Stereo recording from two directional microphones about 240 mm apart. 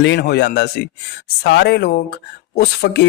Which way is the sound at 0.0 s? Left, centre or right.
Left.